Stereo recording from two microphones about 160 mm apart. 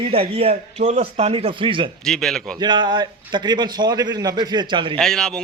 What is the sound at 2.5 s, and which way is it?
A man's voice, 30° right (ahead or behind).